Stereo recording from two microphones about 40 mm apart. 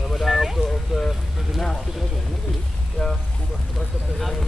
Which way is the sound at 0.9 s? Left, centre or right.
Centre.